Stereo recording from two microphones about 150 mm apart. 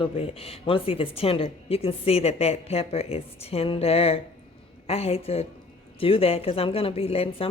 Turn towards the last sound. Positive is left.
turn(degrees=40)  # may be behind; listen again after turning